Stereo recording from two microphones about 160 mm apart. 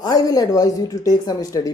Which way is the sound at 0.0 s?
20° left (ahead or behind).